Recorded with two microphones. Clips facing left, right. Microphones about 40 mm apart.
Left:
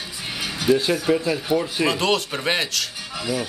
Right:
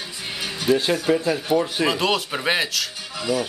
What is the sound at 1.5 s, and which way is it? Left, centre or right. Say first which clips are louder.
A man's voice: right 1 dB; centre.